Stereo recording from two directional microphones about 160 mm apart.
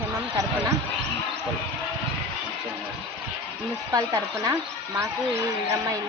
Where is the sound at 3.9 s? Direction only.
20° right (ahead or behind).